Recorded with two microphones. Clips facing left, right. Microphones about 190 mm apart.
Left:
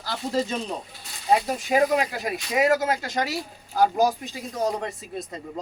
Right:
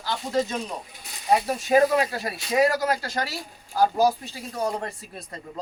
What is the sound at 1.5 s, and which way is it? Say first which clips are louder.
Speech: right 2 dB; 15° left (ahead or behind).